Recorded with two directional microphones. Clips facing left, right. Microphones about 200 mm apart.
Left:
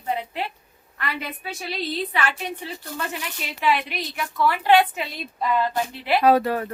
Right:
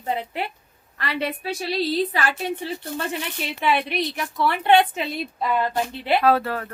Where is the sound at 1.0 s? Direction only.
30° right (ahead or behind).